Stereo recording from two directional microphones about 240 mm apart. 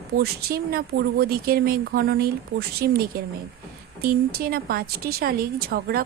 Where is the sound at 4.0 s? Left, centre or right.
Right.